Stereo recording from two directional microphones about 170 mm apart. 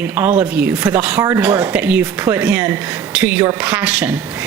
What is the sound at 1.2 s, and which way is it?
Speech, 20° right (ahead or behind).